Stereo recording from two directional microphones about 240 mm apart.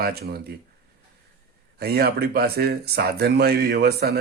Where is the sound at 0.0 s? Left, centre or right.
Right.